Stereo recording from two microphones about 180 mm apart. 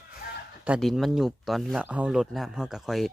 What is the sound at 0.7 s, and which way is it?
Speech, 5° right (ahead or behind).